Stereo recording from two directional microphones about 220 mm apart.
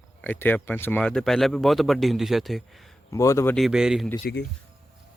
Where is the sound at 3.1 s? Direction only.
15° left (ahead or behind).